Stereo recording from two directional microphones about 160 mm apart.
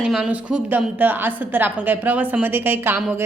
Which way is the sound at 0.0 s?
5° right (ahead or behind).